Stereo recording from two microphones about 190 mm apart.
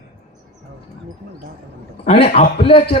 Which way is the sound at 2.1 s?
30° left (ahead or behind).